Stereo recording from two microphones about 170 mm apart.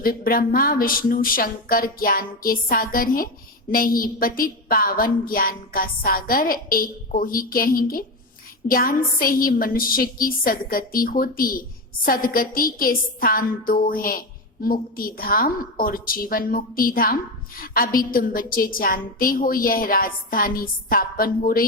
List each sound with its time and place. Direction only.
0.0 s a woman's voice: 60° left (ahead or behind)